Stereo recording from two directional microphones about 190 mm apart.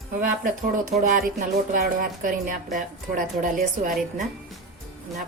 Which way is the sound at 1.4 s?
45° right (ahead or behind).